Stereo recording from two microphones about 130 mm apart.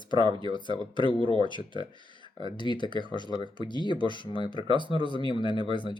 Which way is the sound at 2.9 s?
35° right (ahead or behind).